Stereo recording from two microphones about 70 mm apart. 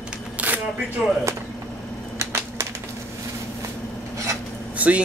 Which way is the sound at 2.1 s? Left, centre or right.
Right.